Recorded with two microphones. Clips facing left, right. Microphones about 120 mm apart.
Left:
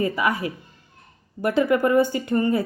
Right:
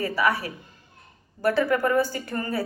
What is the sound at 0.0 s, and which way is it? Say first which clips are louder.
A woman's voice: left 2 dB; 20° left (ahead or behind).